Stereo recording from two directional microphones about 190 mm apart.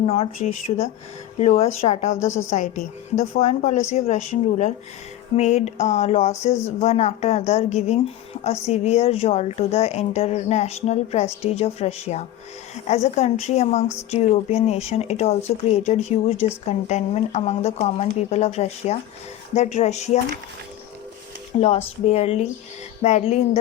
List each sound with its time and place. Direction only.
0.0 s speech: 30° left (ahead or behind)
21.6 s speech: 30° left (ahead or behind)